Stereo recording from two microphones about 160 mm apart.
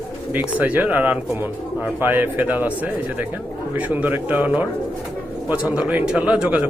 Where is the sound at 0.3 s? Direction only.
10° right (ahead or behind).